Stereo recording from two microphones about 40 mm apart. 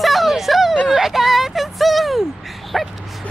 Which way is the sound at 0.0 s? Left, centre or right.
Centre.